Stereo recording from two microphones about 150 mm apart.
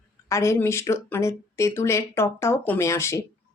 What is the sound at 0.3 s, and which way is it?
Speech, 20° left (ahead or behind).